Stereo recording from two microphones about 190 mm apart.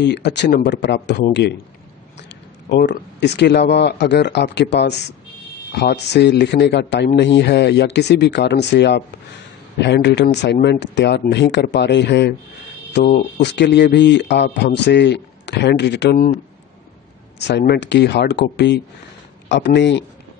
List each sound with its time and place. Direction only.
0.0 s speech: 65° left (ahead or behind)
17.5 s speech: 65° left (ahead or behind)